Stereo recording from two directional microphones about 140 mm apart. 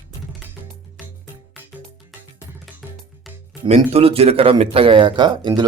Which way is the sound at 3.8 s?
45° right (ahead or behind).